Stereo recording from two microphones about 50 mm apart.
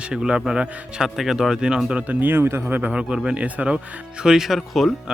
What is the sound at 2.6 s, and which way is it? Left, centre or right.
Speech, right.